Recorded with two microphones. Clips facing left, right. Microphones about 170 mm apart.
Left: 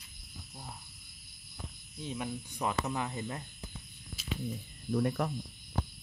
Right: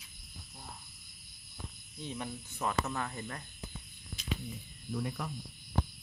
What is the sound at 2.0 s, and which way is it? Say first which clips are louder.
Speech: left 3 dB; 10° left (ahead or behind).